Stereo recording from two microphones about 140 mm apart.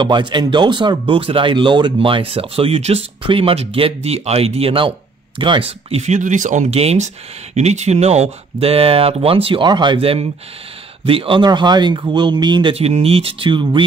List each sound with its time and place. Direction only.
0.0 s speech: 35° right (ahead or behind)
12.7 s speech: 45° right (ahead or behind)